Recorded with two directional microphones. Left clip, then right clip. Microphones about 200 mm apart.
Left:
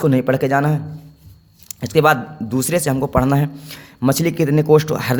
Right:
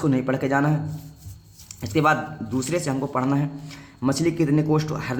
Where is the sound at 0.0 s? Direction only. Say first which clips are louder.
Left 7 dB; 50° left (ahead or behind).